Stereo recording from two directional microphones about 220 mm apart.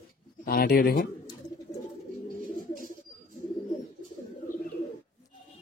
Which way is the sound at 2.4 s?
40° left (ahead or behind).